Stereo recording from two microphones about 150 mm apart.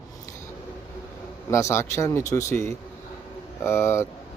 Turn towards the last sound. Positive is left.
turn(degrees=20)  # may be behind; listen again after turning